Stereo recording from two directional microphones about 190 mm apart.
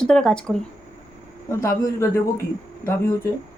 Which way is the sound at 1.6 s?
15° left (ahead or behind).